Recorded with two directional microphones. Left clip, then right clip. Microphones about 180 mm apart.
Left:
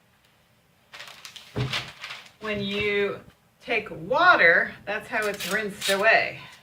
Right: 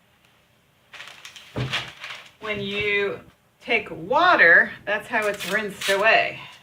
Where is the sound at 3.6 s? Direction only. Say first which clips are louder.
Right 4 dB; 25° right (ahead or behind).